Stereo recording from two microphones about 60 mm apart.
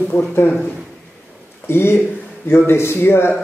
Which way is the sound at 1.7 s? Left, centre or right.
Left.